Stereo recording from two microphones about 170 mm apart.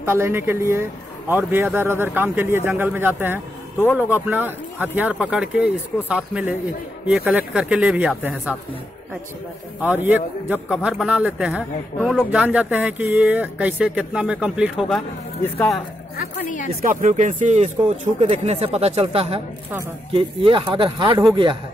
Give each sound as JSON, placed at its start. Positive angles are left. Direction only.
{"t": 0.0, "sound": "a man's voice", "side_deg": -15}
{"t": 9.8, "sound": "a man's voice", "side_deg": -10}
{"t": 15.4, "sound": "speech", "side_deg": 10}
{"t": 16.8, "sound": "speech", "side_deg": -45}